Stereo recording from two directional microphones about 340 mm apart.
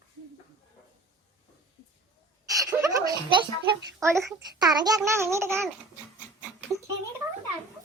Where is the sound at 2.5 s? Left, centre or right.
Centre.